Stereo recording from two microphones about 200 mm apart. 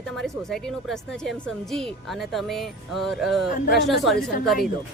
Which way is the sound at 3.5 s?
50° left (ahead or behind).